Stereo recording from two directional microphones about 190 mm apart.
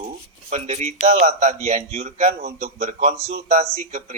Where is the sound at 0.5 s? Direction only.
35° right (ahead or behind).